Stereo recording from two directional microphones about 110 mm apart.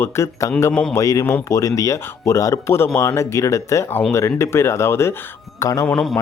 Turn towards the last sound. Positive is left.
turn(degrees=5)  # may be behind; listen again after turning